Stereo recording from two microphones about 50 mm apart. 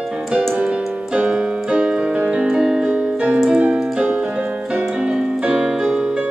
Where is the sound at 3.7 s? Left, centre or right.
Centre.